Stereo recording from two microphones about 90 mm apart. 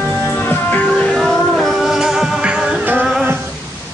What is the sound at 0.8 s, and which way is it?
Music, 5° left (ahead or behind).